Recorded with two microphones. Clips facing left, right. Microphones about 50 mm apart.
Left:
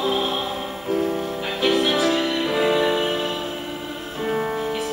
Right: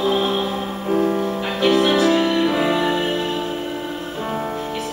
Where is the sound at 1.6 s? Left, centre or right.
Centre.